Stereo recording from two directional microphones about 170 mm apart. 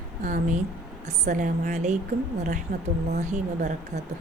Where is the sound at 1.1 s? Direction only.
45° right (ahead or behind).